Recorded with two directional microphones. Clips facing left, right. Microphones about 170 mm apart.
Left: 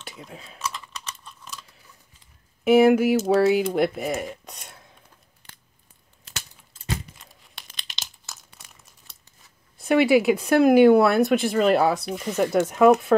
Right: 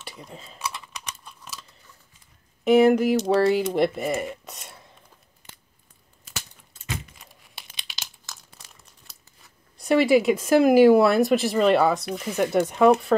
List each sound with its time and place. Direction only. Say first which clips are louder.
0.0 s speech: even; centre (ahead or behind)
0.6 s typing: left 1 dB; 10° right (ahead or behind)
2.6 s speech: left 1 dB; 5° left (ahead or behind)
7.2 s crumpling: even; centre (ahead or behind)
9.8 s speech: even; centre (ahead or behind)